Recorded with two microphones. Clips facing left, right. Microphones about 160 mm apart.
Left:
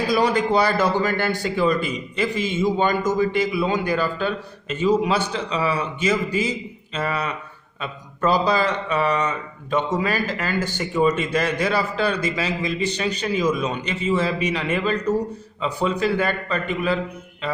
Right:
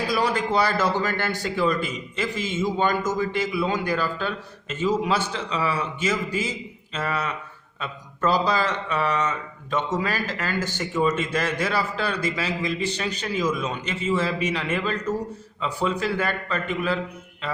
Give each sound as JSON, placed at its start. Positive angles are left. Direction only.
{"t": 0.1, "sound": "a man's voice", "side_deg": 20}